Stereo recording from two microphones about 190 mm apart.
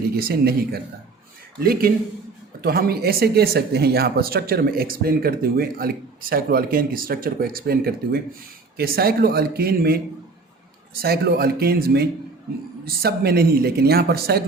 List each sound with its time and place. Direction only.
0.2 s speech: 50° right (ahead or behind)
11.0 s speech: 55° right (ahead or behind)